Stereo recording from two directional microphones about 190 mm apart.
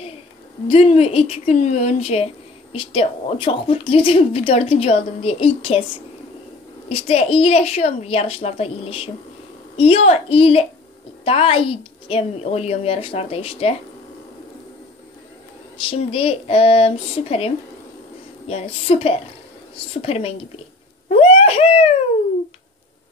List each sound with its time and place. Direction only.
0.7 s a woman's voice: 30° left (ahead or behind)
6.9 s a woman's voice: 30° left (ahead or behind)
15.9 s a woman's voice: 30° left (ahead or behind)
18.5 s a woman's voice: 30° left (ahead or behind)
21.1 s wail: 30° left (ahead or behind)